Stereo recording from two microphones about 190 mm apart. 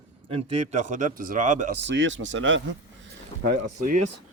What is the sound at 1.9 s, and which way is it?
Speech, 75° right (ahead or behind).